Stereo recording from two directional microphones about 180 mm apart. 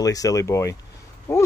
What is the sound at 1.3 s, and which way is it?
Owl, 10° left (ahead or behind).